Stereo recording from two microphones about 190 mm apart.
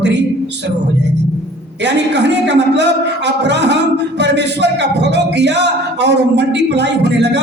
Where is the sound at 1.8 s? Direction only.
65° right (ahead or behind).